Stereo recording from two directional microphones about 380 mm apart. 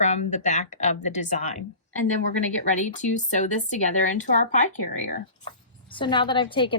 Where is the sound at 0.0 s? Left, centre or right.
Centre.